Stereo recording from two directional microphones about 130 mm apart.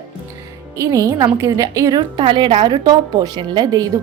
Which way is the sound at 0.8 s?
25° right (ahead or behind).